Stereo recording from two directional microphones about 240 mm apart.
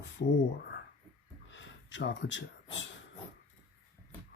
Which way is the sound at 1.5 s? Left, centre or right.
Left.